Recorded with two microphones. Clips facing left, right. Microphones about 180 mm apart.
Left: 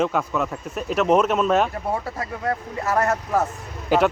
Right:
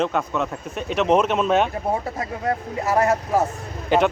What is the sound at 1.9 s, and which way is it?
Speech, 20° right (ahead or behind).